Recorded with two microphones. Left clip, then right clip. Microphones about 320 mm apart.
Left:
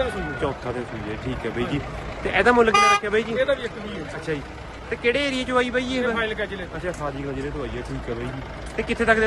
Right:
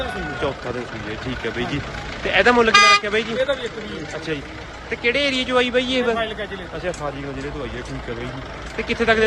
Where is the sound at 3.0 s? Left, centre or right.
Centre.